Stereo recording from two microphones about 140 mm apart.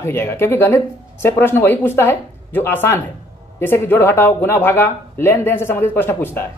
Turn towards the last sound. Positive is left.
turn(degrees=15)  # may be behind; listen again after turning